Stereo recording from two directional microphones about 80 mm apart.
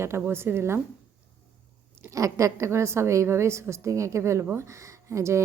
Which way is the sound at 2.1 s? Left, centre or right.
Right.